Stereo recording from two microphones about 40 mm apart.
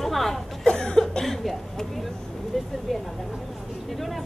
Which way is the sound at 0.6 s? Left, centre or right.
Left.